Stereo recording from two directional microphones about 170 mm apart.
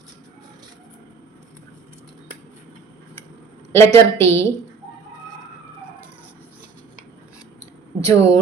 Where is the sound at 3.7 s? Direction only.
15° left (ahead or behind).